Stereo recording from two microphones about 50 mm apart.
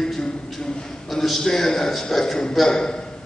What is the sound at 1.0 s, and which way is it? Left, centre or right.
A man's voice, centre.